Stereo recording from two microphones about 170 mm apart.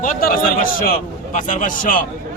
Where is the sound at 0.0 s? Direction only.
55° left (ahead or behind).